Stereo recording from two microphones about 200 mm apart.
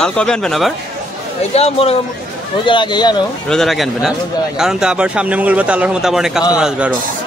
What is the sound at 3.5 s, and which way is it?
A man's voice, centre (ahead or behind).